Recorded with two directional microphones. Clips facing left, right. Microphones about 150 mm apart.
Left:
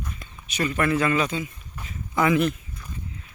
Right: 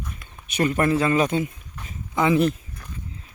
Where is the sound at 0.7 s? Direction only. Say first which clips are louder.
Right 1 dB; 35° right (ahead or behind).